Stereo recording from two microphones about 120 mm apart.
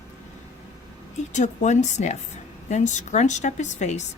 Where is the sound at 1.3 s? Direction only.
80° left.